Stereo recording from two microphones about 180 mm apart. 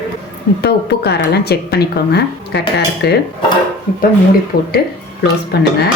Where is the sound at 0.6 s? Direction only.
65° left (ahead or behind).